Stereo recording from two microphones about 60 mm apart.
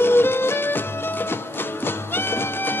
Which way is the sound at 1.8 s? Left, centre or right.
Left.